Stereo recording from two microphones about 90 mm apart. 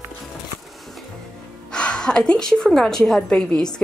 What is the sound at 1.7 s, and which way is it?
A woman's voice, 10° left (ahead or behind).